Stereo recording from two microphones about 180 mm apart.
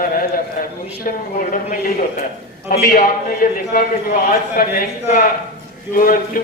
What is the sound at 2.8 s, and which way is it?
Speech, 55° left (ahead or behind).